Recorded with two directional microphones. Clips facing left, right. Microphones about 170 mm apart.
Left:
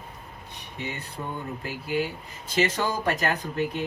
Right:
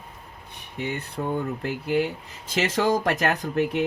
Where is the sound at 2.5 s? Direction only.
80° right.